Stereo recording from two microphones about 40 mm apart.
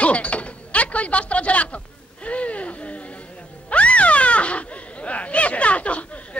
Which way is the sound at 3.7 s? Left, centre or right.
Left.